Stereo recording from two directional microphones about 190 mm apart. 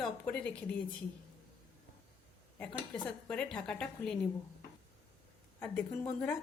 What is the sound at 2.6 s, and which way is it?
A woman's voice, 5° left (ahead or behind).